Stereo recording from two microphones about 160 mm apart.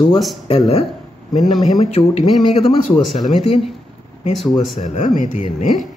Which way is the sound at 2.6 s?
Centre (ahead or behind).